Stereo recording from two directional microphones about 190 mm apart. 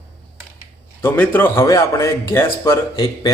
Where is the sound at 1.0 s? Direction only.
10° left (ahead or behind).